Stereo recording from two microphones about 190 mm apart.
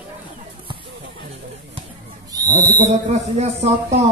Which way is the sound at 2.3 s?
20° right (ahead or behind).